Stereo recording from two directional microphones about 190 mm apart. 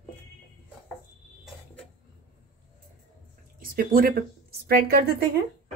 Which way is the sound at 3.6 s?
50° right (ahead or behind).